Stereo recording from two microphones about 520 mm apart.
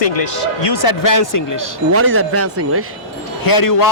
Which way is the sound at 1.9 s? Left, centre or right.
Right.